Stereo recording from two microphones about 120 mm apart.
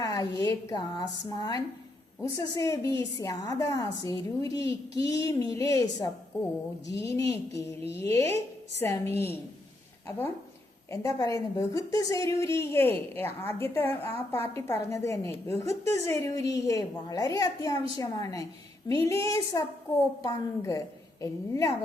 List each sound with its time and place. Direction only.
0.0 s a woman's voice: 30° left (ahead or behind)
10.9 s a woman's voice: 25° left (ahead or behind)
20.2 s a woman's voice: 25° left (ahead or behind)